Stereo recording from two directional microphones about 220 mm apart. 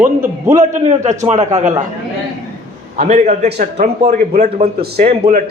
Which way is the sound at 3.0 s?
30° right (ahead or behind).